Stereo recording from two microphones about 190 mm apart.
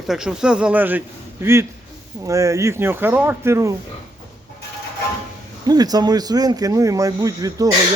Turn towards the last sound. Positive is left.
turn(degrees=-20)  # may be behind; listen again after turning